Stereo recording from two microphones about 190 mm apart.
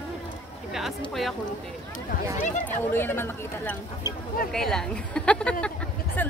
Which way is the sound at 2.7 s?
10° left (ahead or behind).